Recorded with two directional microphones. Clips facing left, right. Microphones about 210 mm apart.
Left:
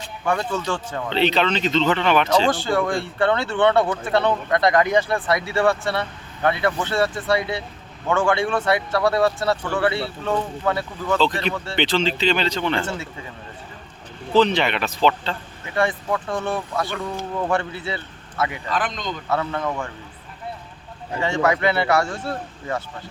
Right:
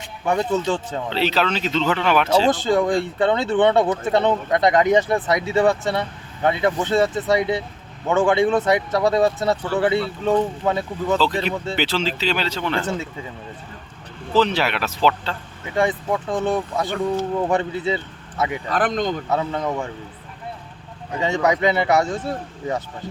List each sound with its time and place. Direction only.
0.0 s speech: 20° right (ahead or behind)
1.1 s speech: 5° right (ahead or behind)
2.5 s speech: 20° right (ahead or behind)
11.2 s speech: 5° right (ahead or behind)
12.8 s speech: 15° right (ahead or behind)
14.3 s speech: 5° right (ahead or behind)
15.7 s speech: 15° right (ahead or behind)
18.7 s speech: 55° right (ahead or behind)
19.3 s speech: 15° right (ahead or behind)
21.2 s speech: 15° right (ahead or behind)